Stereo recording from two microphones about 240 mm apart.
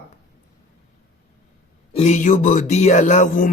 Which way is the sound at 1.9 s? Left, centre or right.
Left.